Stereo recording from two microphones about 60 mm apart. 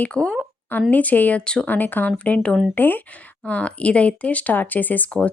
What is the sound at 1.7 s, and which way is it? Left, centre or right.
Speech, left.